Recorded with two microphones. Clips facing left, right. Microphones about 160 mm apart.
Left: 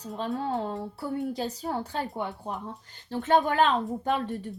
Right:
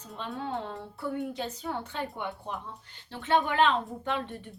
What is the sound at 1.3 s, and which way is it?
A woman's voice, 40° left (ahead or behind).